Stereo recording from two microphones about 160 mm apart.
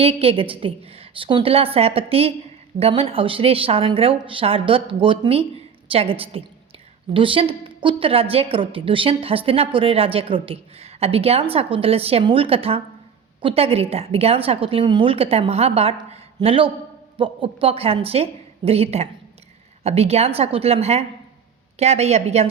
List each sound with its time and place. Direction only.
0.0 s a woman's voice: 35° right (ahead or behind)